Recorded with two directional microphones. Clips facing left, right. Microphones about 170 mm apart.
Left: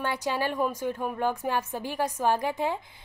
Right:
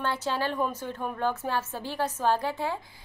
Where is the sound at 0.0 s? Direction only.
15° left (ahead or behind).